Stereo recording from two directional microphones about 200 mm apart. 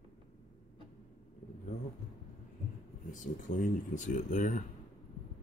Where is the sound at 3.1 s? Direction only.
40° left (ahead or behind).